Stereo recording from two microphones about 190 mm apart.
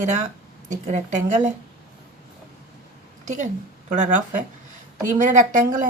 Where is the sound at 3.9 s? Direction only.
40° right (ahead or behind).